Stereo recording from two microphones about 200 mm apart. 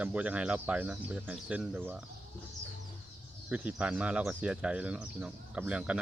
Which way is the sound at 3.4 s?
5° right (ahead or behind).